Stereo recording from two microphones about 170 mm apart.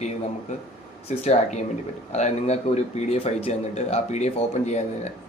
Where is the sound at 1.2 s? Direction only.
40° left (ahead or behind).